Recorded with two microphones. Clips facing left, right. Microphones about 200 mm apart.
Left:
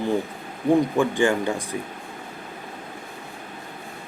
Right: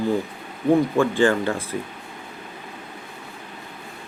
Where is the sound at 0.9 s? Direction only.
15° left (ahead or behind).